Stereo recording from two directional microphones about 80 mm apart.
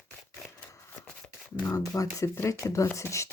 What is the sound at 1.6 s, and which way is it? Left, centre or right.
Speech, left.